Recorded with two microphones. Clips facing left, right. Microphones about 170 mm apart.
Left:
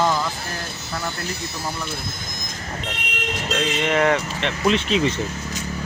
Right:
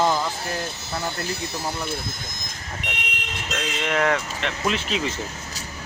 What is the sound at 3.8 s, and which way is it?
Speech, centre (ahead or behind).